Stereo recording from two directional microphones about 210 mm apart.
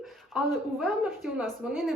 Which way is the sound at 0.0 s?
Centre (ahead or behind).